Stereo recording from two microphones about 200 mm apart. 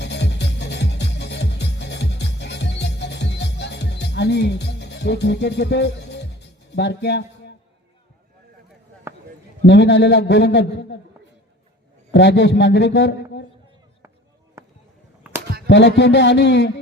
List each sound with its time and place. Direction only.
0.0 s music: 60° left (ahead or behind)
9.1 s basketball bounce: 15° right (ahead or behind)
9.6 s a man's voice: 60° left (ahead or behind)
12.1 s a man's voice: 60° left (ahead or behind)
14.6 s a sound: 15° right (ahead or behind)
15.6 s a man's voice: 60° left (ahead or behind)